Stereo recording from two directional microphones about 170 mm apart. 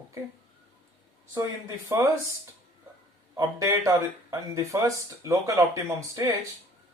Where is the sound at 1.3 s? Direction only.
20° right (ahead or behind).